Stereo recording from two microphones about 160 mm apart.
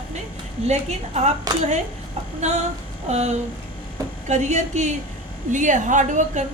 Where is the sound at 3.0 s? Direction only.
45° right (ahead or behind).